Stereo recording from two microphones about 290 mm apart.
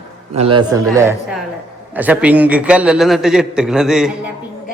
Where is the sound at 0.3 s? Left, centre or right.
Centre.